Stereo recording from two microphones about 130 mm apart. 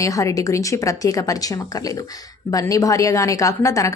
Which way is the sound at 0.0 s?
25° left (ahead or behind).